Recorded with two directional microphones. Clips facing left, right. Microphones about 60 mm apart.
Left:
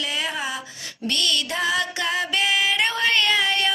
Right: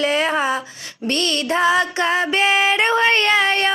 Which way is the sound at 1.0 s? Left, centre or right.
Right.